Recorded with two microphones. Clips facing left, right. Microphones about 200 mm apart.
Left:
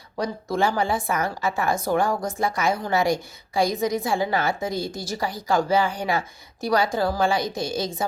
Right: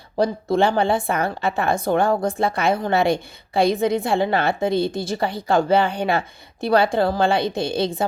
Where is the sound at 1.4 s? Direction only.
60° right (ahead or behind).